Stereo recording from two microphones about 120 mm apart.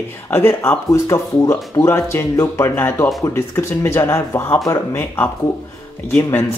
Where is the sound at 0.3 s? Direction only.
20° left (ahead or behind).